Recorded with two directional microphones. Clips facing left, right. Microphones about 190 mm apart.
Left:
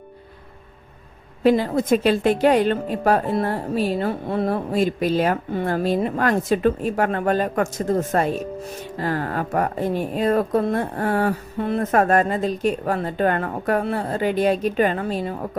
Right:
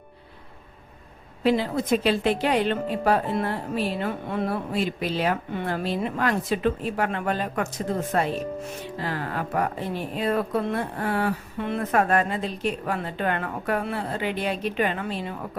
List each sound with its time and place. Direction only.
1.5 s speech: 45° left (ahead or behind)